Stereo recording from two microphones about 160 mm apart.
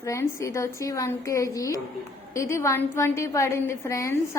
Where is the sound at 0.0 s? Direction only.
20° left (ahead or behind).